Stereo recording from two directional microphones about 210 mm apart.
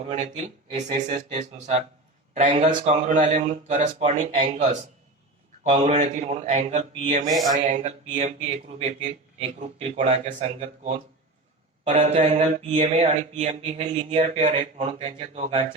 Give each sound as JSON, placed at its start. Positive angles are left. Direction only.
{"t": 0.1, "sound": "speech", "side_deg": -35}
{"t": 7.3, "sound": "speech", "side_deg": 0}
{"t": 7.5, "sound": "speech", "side_deg": -30}
{"t": 11.9, "sound": "speech", "side_deg": -30}